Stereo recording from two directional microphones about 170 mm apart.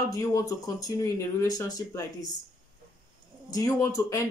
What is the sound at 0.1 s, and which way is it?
Speech, 20° left (ahead or behind).